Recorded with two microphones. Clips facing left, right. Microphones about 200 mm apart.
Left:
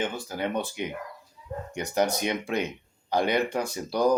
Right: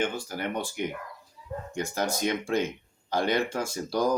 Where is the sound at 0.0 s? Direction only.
20° left (ahead or behind).